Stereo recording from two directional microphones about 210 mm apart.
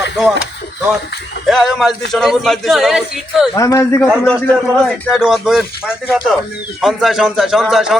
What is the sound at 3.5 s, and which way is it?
Speech, 15° left (ahead or behind).